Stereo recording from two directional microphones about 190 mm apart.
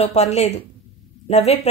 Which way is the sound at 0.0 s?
35° left (ahead or behind).